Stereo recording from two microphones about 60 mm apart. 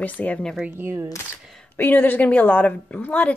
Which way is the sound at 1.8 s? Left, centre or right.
Left.